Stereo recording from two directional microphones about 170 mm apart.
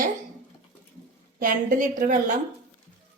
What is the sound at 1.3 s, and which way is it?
Speech, 55° right (ahead or behind).